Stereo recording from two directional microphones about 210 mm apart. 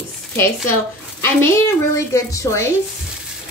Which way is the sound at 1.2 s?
10° left (ahead or behind).